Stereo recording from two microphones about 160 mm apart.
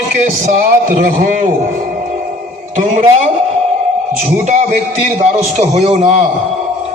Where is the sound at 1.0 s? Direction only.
55° right (ahead or behind).